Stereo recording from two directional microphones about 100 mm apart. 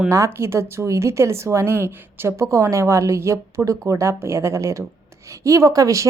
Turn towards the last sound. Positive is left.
turn(degrees=-35)  # may be behind; listen again after turning